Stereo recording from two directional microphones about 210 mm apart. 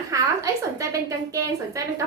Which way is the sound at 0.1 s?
15° right (ahead or behind).